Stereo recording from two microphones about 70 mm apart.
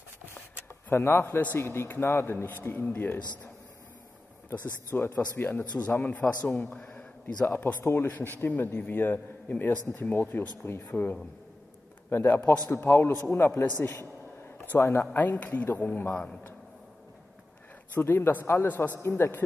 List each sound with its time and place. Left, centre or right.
0.8 s a man's voice: left
4.5 s a man's voice: left
6.8 s a sound: centre
7.4 s a man's voice: left
13.6 s a sound: left
14.8 s a man's voice: left
15.1 s a man's voice: left
17.9 s a man's voice: left